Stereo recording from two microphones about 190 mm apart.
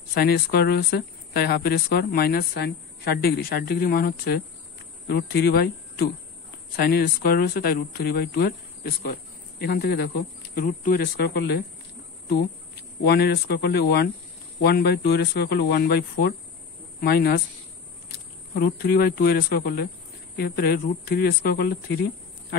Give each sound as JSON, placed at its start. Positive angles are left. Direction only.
{"t": 0.1, "sound": "speech", "side_deg": 55}